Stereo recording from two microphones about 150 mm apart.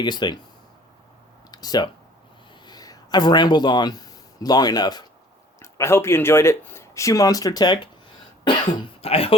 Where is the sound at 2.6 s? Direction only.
25° left (ahead or behind).